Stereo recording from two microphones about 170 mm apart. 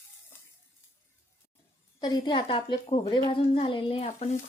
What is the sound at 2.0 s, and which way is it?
A woman's voice, 25° left (ahead or behind).